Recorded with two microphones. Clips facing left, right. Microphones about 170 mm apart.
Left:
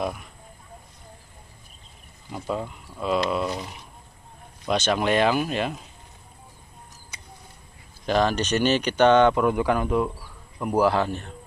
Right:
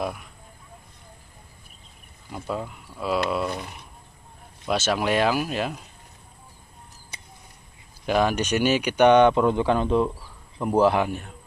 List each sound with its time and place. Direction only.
0.0 s speech: centre (ahead or behind)
2.3 s speech: centre (ahead or behind)
8.0 s speech: 10° right (ahead or behind)
11.1 s speech: 10° right (ahead or behind)